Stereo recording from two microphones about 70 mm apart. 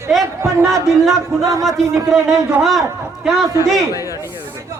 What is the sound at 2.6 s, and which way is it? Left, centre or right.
Speech, centre.